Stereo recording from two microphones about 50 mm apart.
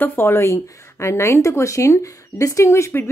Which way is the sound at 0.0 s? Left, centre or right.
Left.